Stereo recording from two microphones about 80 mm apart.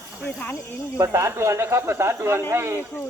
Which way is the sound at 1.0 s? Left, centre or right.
Right.